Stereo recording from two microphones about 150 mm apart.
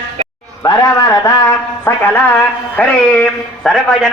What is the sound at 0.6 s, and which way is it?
A man's voice, 25° left (ahead or behind).